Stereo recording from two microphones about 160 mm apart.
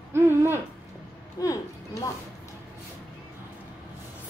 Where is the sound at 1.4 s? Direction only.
20° left (ahead or behind).